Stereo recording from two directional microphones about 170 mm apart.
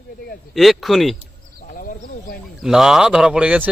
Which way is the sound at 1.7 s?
55° left (ahead or behind).